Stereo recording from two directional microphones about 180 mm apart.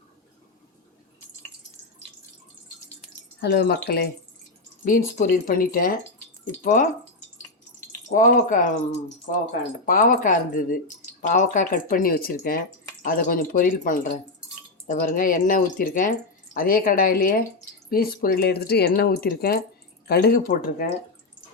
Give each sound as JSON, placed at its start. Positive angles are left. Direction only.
{"t": 3.4, "sound": "speech", "side_deg": 65}
{"t": 4.9, "sound": "speech", "side_deg": 45}
{"t": 8.1, "sound": "speech", "side_deg": 45}
{"t": 9.8, "sound": "speech", "side_deg": 50}